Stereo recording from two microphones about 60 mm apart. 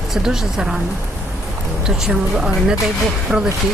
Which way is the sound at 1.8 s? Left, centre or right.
Centre.